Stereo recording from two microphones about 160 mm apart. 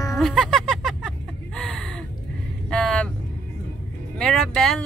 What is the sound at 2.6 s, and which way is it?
Vehicle, 5° left (ahead or behind).